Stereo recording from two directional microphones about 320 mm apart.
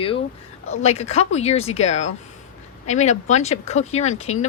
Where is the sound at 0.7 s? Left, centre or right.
Centre.